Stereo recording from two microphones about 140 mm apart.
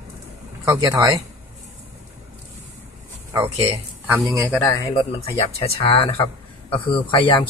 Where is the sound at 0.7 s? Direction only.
25° right (ahead or behind).